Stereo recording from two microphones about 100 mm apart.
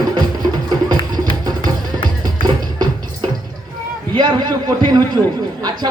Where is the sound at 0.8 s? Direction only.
40° right (ahead or behind).